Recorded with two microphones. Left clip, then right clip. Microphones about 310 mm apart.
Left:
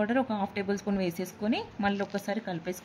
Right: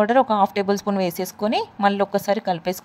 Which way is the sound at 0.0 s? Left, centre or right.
Right.